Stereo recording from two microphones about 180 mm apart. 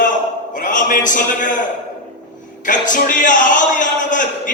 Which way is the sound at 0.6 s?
50° left (ahead or behind).